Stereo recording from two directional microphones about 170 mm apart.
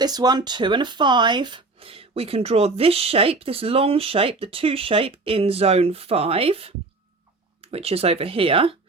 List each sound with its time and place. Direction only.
0.0 s speech: 25° right (ahead or behind)